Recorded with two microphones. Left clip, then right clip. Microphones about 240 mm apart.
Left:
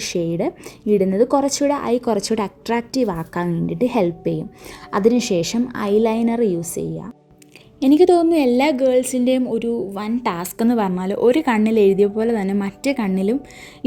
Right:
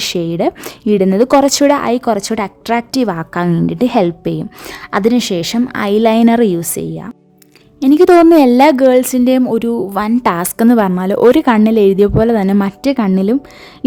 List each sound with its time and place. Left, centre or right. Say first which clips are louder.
0.0 s a woman's voice: right 6 dB; right